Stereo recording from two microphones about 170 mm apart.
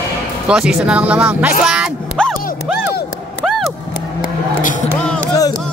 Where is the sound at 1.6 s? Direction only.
5° right (ahead or behind).